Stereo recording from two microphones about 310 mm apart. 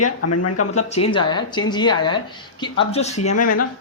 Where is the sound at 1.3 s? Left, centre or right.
Centre.